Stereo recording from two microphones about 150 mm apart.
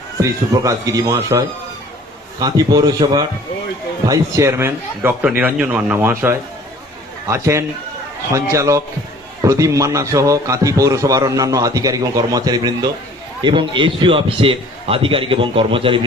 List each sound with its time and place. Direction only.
0.2 s a man's voice: 20° right (ahead or behind)